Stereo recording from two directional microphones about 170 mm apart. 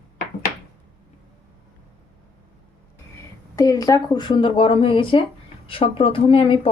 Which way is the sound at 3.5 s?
20° left (ahead or behind).